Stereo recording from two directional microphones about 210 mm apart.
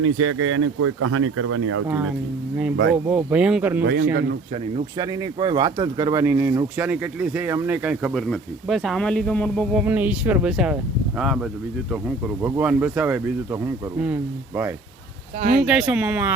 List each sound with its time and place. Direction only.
0.0 s speech: 90° right
3.1 s speech: 5° right (ahead or behind)
4.1 s speech: 45° right (ahead or behind)
4.9 s speech: 15° right (ahead or behind); by 9.8 s 5° left (ahead or behind)
9.8 s speech: 10° right (ahead or behind)
15.4 s speech: 35° right (ahead or behind)
15.6 s speech: 5° right (ahead or behind)